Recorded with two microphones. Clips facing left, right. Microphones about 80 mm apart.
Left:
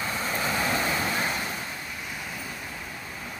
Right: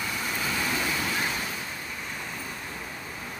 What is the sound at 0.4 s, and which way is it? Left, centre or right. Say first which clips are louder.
Waves: left 3 dB; left.